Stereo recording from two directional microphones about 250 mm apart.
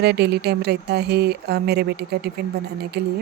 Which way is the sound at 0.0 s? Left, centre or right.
Right.